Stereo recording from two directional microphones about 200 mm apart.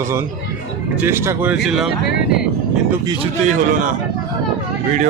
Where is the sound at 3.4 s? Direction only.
40° right (ahead or behind).